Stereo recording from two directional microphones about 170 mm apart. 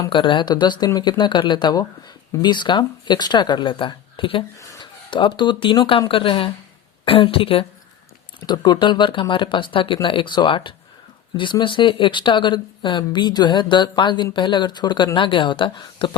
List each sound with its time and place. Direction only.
0.0 s speech: 30° left (ahead or behind)